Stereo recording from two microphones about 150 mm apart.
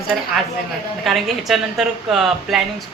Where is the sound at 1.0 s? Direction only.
Centre (ahead or behind).